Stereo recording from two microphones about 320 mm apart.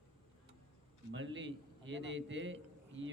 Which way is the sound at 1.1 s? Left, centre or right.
Right.